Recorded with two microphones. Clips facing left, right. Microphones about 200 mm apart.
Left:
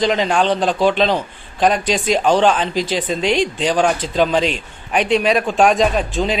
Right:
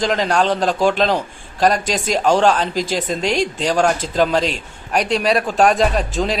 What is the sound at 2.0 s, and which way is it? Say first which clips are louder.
Speech: left 1 dB; 45° right (ahead or behind).